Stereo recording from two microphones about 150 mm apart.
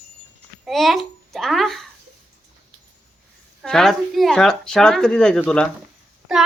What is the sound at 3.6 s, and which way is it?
A child's voice, centre (ahead or behind).